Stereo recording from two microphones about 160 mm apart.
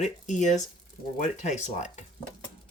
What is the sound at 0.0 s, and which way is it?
Speech, 50° left (ahead or behind).